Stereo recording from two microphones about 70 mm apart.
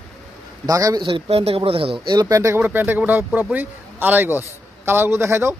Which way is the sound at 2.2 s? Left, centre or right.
Right.